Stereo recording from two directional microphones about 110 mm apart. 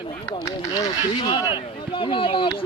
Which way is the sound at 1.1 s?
50° left (ahead or behind).